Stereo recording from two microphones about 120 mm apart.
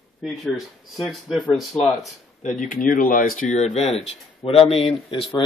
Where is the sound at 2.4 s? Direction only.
90° left.